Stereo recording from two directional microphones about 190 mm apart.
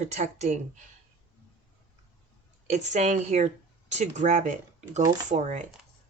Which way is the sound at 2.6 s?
35° right (ahead or behind).